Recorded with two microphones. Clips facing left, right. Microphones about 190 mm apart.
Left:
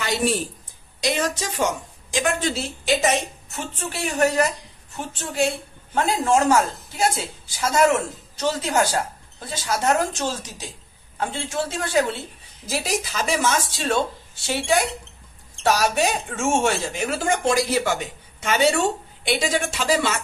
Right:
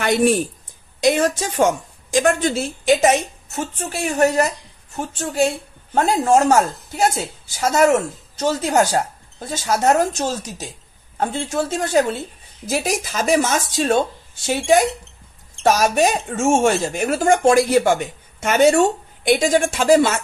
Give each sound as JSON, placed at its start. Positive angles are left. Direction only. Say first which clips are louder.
{"t": 0.0, "sound": "a woman's voice", "louder": "right 7 dB", "side_deg": -55}
{"t": 3.7, "sound": "speech", "louder": "right 2 dB", "side_deg": -45}
{"t": 8.4, "sound": "speech", "louder": "right 4 dB", "side_deg": -45}